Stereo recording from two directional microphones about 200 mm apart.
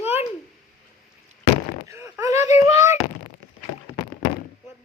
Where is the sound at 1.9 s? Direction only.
15° right (ahead or behind).